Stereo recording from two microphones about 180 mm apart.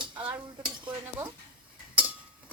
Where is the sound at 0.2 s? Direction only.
5° right (ahead or behind).